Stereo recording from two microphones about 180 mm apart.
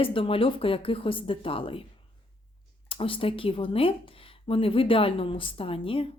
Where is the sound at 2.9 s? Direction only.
30° left (ahead or behind).